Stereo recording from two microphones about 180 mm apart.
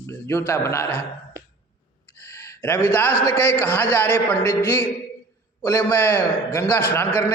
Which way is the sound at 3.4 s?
10° left (ahead or behind).